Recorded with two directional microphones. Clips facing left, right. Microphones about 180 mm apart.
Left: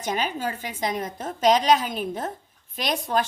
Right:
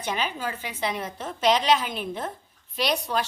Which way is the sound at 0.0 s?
45° left (ahead or behind).